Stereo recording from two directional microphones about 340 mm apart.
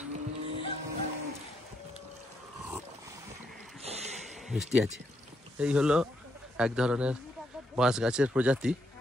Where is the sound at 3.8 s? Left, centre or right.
Centre.